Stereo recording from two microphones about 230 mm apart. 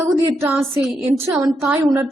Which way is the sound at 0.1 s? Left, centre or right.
Centre.